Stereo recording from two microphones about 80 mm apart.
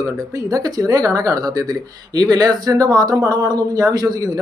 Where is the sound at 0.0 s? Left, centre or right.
Right.